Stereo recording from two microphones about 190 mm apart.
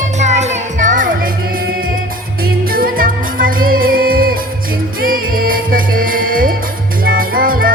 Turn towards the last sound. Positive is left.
turn(degrees=-50)  # may be behind; listen again after turning